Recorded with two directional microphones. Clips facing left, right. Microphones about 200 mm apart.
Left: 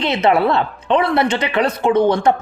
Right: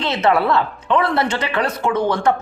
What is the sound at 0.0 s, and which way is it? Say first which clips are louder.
A woman's voice: left 2 dB; 15° left (ahead or behind).